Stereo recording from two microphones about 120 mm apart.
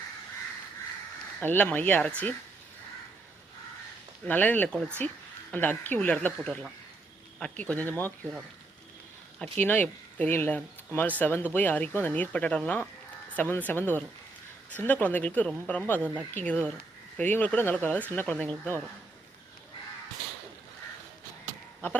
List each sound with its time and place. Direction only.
1.4 s speech: 15° left (ahead or behind)
4.3 s speech: 15° left (ahead or behind)
9.6 s speech: 15° left (ahead or behind)